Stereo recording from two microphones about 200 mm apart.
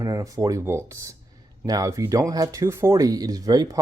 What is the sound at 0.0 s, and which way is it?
Speech, 15° right (ahead or behind).